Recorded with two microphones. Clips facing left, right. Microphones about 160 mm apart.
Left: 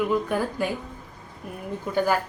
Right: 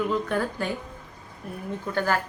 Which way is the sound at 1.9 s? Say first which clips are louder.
Left 3 dB; 10° left (ahead or behind).